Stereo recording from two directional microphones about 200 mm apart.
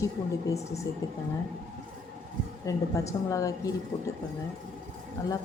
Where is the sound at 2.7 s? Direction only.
15° left (ahead or behind).